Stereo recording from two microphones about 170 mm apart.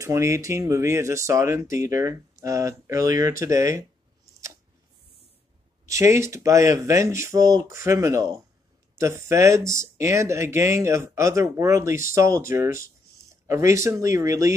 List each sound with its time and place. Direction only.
0.0 s speech: 15° right (ahead or behind)
5.9 s speech: 15° right (ahead or behind)